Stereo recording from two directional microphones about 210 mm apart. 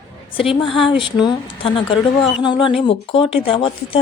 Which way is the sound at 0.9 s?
25° left (ahead or behind).